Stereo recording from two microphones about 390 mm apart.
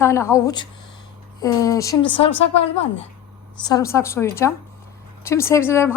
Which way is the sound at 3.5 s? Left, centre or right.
Centre.